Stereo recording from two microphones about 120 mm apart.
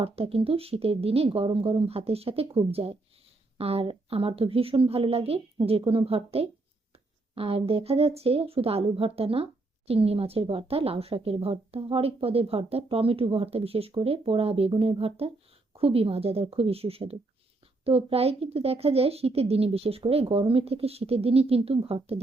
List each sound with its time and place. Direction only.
0.0 s a woman's voice: 55° right (ahead or behind)